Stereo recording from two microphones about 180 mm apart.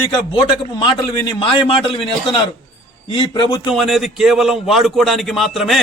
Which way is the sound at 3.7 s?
Centre (ahead or behind).